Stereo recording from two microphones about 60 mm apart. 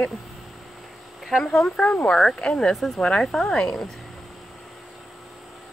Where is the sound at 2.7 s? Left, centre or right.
Centre.